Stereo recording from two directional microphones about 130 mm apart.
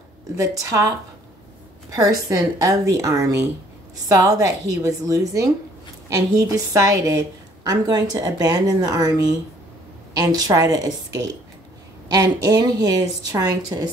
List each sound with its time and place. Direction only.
0.4 s a woman's voice: 25° right (ahead or behind)